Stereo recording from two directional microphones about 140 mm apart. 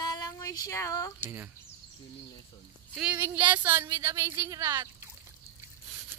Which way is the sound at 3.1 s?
15° right (ahead or behind).